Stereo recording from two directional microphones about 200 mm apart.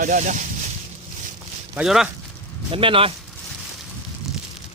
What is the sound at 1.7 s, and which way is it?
Speech, 5° right (ahead or behind).